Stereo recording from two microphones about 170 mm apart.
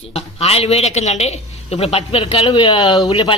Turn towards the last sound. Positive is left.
turn(degrees=20)  # may be behind; listen again after turning